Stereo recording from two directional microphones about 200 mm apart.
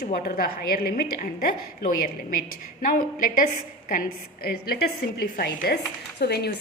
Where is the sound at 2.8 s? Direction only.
45° left (ahead or behind).